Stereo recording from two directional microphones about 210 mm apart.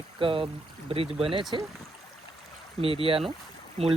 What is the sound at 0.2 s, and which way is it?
Speech, 25° right (ahead or behind).